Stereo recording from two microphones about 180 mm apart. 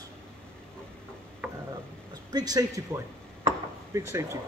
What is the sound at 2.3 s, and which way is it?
Speech, 20° right (ahead or behind).